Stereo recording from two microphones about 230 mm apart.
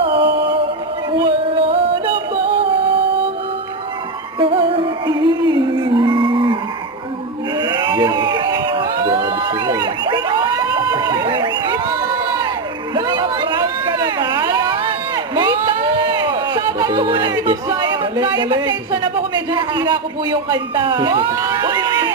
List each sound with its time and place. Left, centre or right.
0.0 s music: right
4.4 s music: right
7.6 s a sound: centre
19.5 s speech: centre